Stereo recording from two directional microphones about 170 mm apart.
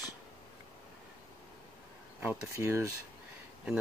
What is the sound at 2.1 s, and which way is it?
Speech, 15° right (ahead or behind).